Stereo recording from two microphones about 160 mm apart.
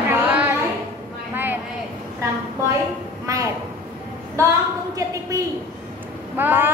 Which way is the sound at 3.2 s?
20° right (ahead or behind).